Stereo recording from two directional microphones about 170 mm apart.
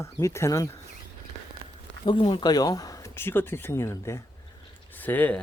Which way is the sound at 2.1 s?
30° left (ahead or behind).